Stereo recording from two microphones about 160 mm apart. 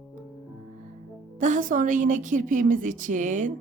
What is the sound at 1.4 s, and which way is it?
A woman's voice, 50° right (ahead or behind).